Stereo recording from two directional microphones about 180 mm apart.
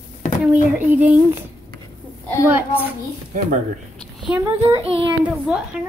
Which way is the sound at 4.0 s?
Centre (ahead or behind).